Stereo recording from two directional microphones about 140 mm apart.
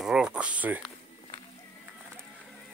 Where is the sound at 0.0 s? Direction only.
5° right (ahead or behind).